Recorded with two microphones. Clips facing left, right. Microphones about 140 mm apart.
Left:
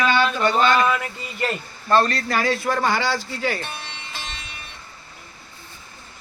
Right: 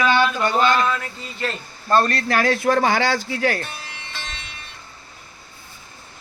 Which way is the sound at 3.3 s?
80° right.